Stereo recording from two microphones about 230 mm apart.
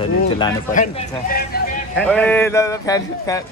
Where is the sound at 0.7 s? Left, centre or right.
Left.